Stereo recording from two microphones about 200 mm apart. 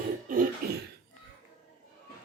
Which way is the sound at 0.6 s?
50° right (ahead or behind).